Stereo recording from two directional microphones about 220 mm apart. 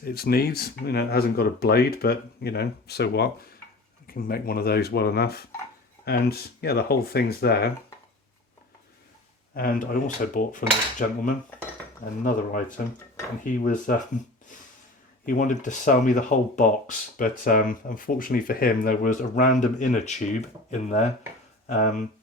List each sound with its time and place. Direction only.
0.0 s speech: 45° left (ahead or behind)
9.6 s speech: 40° left (ahead or behind)
12.2 s speech: 35° left (ahead or behind)
15.3 s speech: 35° left (ahead or behind)